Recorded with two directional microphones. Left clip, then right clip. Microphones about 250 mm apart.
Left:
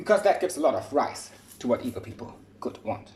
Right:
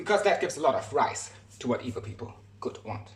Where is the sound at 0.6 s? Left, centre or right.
Centre.